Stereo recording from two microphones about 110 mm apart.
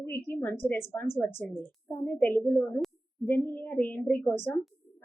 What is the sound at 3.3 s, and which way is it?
A woman's voice, 20° left (ahead or behind).